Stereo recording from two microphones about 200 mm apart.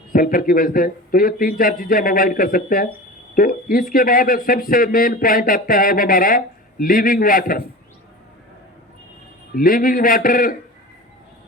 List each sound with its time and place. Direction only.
0.1 s a man's voice: 45° left (ahead or behind)
9.6 s a man's voice: 45° left (ahead or behind)